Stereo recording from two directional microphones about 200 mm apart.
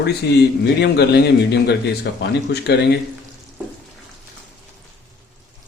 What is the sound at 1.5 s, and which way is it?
Speech, 60° left (ahead or behind).